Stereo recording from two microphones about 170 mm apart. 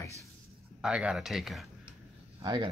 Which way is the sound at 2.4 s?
25° right (ahead or behind).